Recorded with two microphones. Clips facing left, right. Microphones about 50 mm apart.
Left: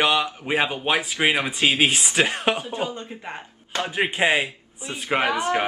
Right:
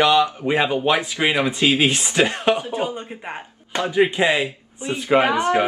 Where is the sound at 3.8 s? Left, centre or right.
Left.